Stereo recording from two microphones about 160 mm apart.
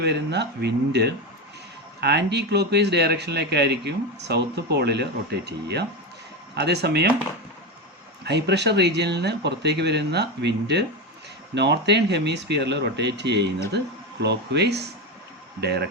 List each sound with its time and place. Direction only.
0.0 s speech: 90° right
8.2 s speech: 90° right